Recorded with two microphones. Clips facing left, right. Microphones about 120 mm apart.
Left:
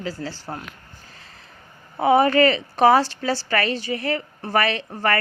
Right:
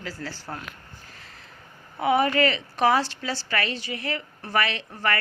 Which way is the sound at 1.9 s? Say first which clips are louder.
Left 5 dB; 30° left (ahead or behind).